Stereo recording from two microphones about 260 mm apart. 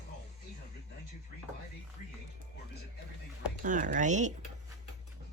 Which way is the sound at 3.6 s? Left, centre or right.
Right.